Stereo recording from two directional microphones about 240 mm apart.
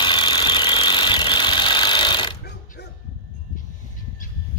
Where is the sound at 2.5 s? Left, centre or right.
Left.